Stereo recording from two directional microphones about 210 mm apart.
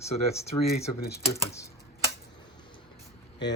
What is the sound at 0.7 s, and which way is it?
Speech, 50° left (ahead or behind).